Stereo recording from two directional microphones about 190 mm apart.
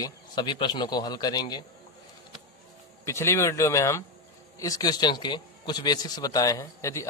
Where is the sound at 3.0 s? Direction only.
15° left (ahead or behind).